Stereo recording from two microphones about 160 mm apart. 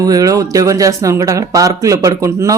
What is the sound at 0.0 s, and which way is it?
Speech, 20° right (ahead or behind).